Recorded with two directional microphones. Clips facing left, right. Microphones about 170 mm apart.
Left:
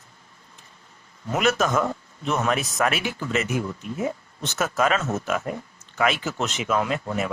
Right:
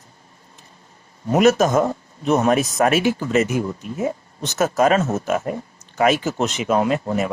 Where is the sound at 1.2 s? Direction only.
40° right (ahead or behind).